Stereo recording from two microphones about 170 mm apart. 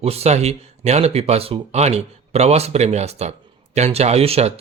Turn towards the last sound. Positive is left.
turn(degrees=-35)  # may be behind; listen again after turning